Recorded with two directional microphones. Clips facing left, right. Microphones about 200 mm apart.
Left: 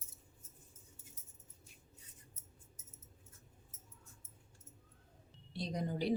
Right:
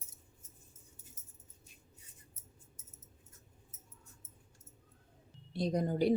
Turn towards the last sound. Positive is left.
turn(degrees=-50)  # may be behind; listen again after turning